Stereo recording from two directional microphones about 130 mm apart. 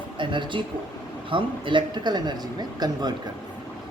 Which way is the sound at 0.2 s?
40° right (ahead or behind).